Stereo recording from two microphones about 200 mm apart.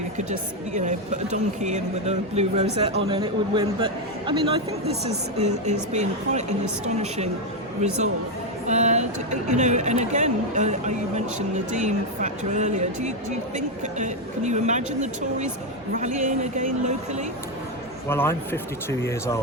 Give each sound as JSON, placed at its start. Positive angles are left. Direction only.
{"t": 0.3, "sound": "a woman's voice", "side_deg": -35}
{"t": 8.6, "sound": "a woman's voice", "side_deg": -35}
{"t": 18.1, "sound": "speech", "side_deg": 10}